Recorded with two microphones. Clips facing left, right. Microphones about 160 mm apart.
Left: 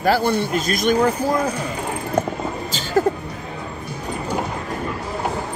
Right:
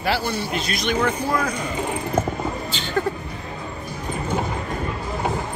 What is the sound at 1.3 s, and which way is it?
Speech, 30° left (ahead or behind).